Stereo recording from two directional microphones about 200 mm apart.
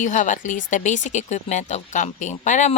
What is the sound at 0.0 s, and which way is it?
Speech, 40° left (ahead or behind).